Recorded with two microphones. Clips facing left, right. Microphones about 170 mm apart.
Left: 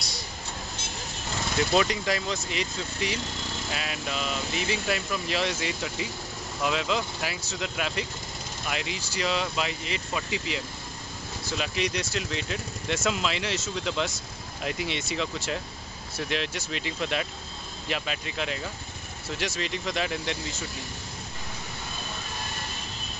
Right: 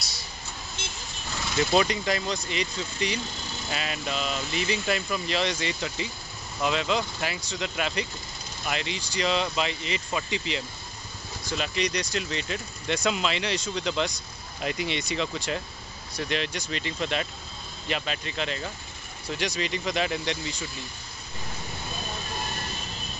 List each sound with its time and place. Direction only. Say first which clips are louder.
1.7 s speech: right 1 dB; centre (ahead or behind)